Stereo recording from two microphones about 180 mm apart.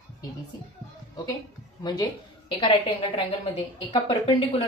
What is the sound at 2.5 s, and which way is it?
A woman's voice, 30° left (ahead or behind).